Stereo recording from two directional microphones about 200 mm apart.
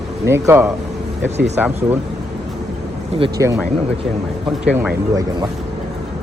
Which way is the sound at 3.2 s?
15° right (ahead or behind).